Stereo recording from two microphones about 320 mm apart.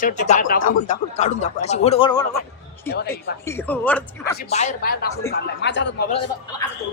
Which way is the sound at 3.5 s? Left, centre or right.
Centre.